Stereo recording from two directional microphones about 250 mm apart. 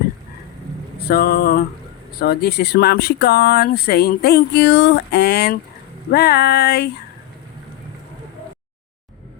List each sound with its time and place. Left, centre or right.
0.9 s vehicle: left
2.1 s speech: left